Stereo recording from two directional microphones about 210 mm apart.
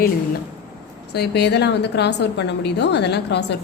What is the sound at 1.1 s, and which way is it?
A woman's voice, 50° left (ahead or behind).